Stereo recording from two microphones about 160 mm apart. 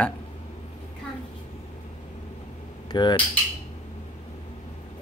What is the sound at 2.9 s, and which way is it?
Cutlery, 30° left (ahead or behind).